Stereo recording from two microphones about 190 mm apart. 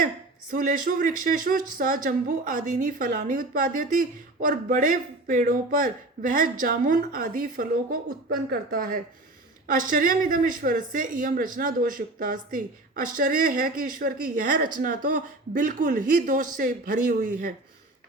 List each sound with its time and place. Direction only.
0.5 s speech: 45° right (ahead or behind)